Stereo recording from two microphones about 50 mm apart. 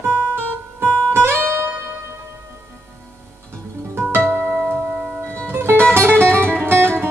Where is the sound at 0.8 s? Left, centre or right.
Left.